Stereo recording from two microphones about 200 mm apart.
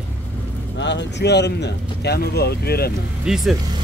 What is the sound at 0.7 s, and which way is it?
Speech, 60° left (ahead or behind).